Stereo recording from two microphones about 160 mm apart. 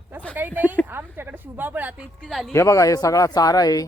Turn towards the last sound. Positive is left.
turn(degrees=25)  # may be behind; listen again after turning